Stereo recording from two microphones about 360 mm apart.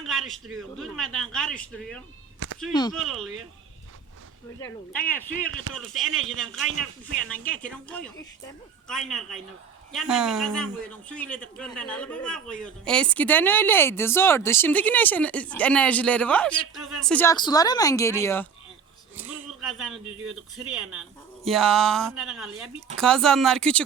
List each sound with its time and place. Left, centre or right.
0.0 s a man's voice: centre
2.4 s a sound: right
2.7 s speech: centre
3.1 s a man's voice: centre
4.6 s a man's voice: centre
5.3 s speech: right
5.7 s a man's voice: centre
19.1 s a sound: centre
20.2 s a man's voice: centre